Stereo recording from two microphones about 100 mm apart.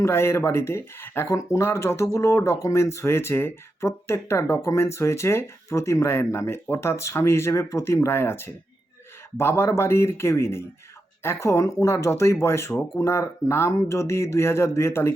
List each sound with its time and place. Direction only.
0.0 s speech: 25° left (ahead or behind)